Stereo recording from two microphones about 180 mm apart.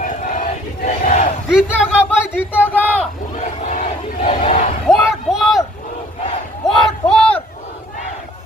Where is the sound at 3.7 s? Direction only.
50° left (ahead or behind).